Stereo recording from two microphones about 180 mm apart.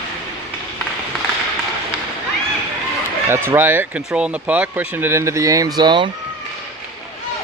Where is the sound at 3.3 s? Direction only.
10° right (ahead or behind).